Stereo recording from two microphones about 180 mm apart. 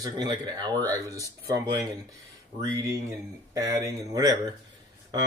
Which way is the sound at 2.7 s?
20° right (ahead or behind).